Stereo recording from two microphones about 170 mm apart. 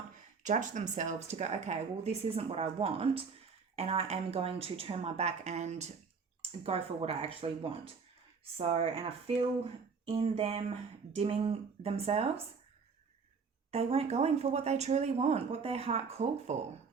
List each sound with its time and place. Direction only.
0.4 s speech: 45° right (ahead or behind)
13.7 s speech: 35° right (ahead or behind)